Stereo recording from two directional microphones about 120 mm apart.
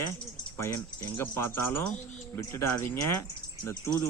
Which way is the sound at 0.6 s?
20° left (ahead or behind).